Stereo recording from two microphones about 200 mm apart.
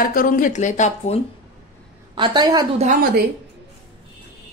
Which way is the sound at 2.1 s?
20° right (ahead or behind).